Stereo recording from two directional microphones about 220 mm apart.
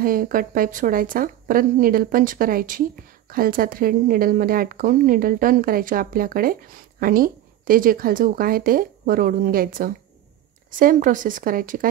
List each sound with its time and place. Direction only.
0.0 s speech: 40° right (ahead or behind)